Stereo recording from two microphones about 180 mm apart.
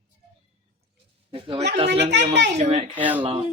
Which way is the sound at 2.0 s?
75° right (ahead or behind).